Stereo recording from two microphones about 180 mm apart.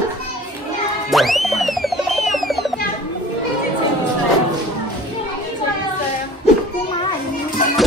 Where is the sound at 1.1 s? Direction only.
Centre (ahead or behind).